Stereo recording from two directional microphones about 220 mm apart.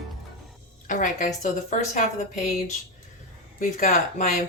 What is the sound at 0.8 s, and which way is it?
A woman's voice, 35° left (ahead or behind).